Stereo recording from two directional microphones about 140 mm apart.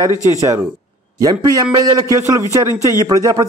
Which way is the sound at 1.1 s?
25° right (ahead or behind).